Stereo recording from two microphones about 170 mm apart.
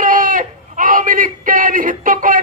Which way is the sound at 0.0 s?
55° right (ahead or behind).